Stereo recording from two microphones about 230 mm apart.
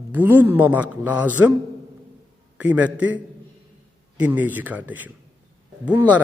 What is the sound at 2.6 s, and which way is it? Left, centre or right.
A man's voice, centre.